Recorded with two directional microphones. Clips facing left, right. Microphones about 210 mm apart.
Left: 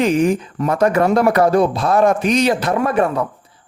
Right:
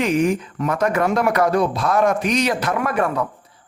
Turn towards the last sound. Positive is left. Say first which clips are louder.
# left 4 dB
turn(degrees=30)  # may be behind; listen again after turning